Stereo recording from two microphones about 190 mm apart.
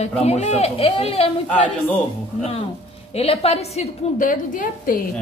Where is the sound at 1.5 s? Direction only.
5° left (ahead or behind).